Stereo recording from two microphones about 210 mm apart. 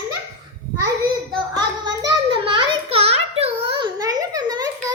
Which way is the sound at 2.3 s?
25° right (ahead or behind).